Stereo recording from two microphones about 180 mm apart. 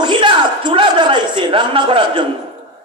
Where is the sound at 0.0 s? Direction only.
25° right (ahead or behind).